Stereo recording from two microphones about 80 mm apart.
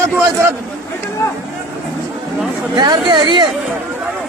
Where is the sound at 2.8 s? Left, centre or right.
Right.